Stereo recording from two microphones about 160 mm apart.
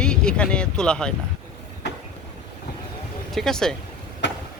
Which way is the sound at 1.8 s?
90° left.